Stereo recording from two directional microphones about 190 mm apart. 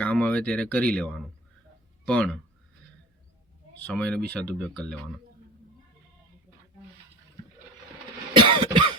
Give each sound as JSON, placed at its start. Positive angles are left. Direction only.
{"t": 0.0, "sound": "speech", "side_deg": 5}
{"t": 3.8, "sound": "speech", "side_deg": 5}
{"t": 8.4, "sound": "cough", "side_deg": -25}